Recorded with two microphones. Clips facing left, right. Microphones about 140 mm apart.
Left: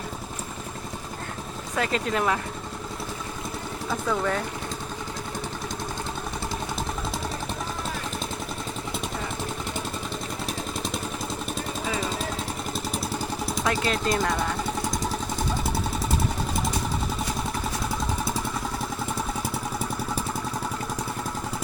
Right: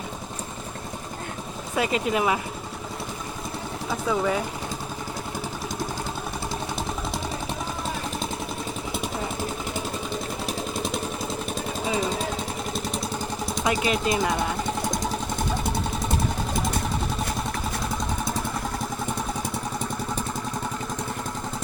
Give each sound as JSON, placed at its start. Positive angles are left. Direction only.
{"t": 1.7, "sound": "speech", "side_deg": -10}
{"t": 3.8, "sound": "speech", "side_deg": -5}
{"t": 8.9, "sound": "vehicle", "side_deg": -5}
{"t": 11.9, "sound": "a sound", "side_deg": 0}
{"t": 12.7, "sound": "vehicle", "side_deg": 0}
{"t": 13.7, "sound": "speech", "side_deg": -15}
{"t": 14.0, "sound": "vehicle", "side_deg": -5}
{"t": 15.6, "sound": "jackhammer", "side_deg": 5}